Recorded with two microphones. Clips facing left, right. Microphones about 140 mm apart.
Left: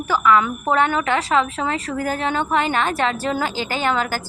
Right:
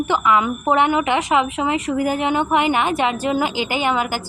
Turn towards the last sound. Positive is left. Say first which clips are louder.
# right 1 dB
turn(degrees=-10)  # may be behind; listen again after turning